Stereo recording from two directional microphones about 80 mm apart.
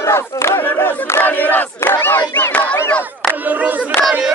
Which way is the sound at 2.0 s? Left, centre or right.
Left.